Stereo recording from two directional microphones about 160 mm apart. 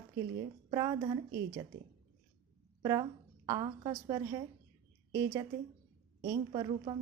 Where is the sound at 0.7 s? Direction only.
25° right (ahead or behind).